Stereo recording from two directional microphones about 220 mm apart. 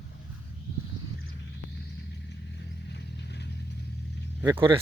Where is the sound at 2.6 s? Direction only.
50° left (ahead or behind).